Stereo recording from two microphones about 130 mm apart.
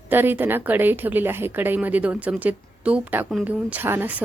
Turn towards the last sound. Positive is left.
turn(degrees=-15)  # may be behind; listen again after turning